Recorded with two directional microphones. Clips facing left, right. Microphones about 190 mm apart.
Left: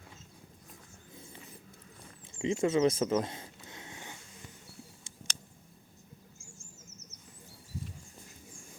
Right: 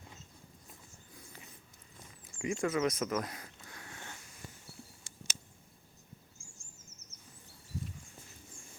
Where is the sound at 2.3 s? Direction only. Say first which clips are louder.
Left 5 dB; 25° left (ahead or behind).